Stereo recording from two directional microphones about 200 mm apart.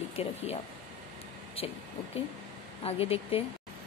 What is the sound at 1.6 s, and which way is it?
Speech, 30° left (ahead or behind).